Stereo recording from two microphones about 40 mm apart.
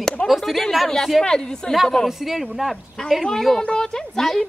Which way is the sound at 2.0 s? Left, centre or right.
Centre.